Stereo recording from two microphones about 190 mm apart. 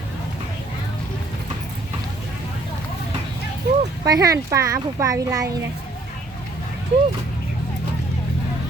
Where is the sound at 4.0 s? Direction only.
20° right (ahead or behind).